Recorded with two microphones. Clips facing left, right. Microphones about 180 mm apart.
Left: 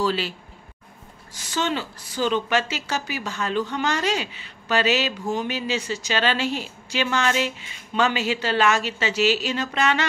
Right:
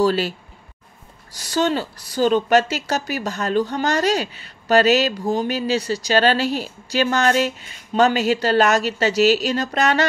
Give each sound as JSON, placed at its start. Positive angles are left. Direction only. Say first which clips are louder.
{"t": 0.0, "sound": "speech", "louder": "right 6 dB", "side_deg": -45}
{"t": 1.3, "sound": "a woman's voice", "louder": "right 6 dB", "side_deg": -35}